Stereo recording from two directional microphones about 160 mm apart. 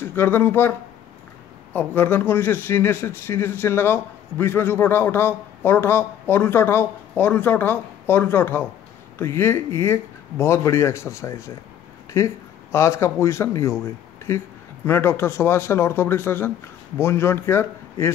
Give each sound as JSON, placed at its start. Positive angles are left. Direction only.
{"t": 0.0, "sound": "a man's voice", "side_deg": 15}